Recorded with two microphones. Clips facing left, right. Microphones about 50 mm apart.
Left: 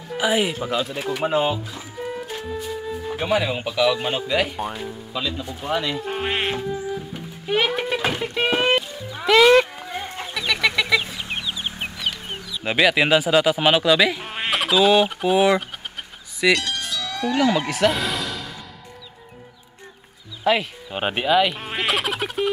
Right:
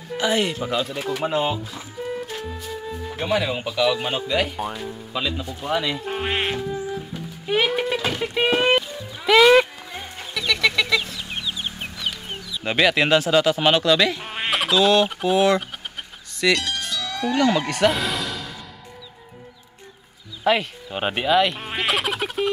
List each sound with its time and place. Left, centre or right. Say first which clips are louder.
0.1 s speech: left 1 dB; centre
0.9 s speech: left 1 dB; centre
5.5 s speech: even; centre
10.3 s chicken: right 1 dB; centre
12.0 s speech: even; centre
16.6 s music: even; centre
20.4 s a sound: even; centre